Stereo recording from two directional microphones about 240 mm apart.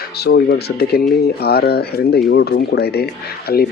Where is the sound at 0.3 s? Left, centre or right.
Left.